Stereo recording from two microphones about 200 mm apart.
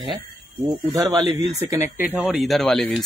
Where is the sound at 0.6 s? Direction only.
20° right (ahead or behind).